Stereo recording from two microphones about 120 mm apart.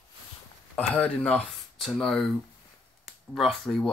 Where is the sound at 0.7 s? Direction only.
10° left (ahead or behind).